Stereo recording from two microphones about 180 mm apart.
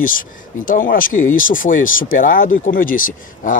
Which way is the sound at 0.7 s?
50° left (ahead or behind).